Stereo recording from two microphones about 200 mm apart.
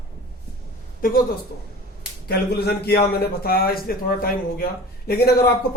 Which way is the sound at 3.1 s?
50° left (ahead or behind).